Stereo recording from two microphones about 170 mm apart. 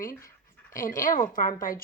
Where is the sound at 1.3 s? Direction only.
55° left (ahead or behind).